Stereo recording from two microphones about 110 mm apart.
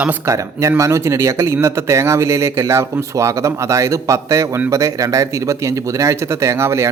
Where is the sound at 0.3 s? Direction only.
30° right (ahead or behind).